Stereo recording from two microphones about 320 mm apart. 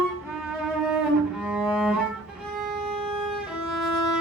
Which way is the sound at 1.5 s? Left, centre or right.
Centre.